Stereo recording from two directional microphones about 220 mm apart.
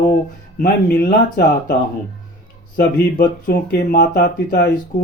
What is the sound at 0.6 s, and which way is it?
Speech, 45° left (ahead or behind).